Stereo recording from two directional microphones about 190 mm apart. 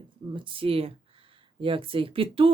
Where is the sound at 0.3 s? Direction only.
25° right (ahead or behind).